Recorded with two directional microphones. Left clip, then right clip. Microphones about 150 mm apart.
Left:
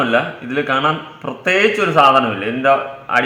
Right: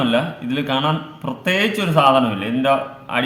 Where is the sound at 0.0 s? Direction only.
15° right (ahead or behind).